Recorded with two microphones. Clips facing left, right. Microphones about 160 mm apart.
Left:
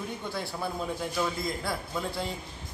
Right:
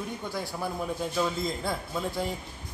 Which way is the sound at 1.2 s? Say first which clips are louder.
Right 2 dB; 15° right (ahead or behind).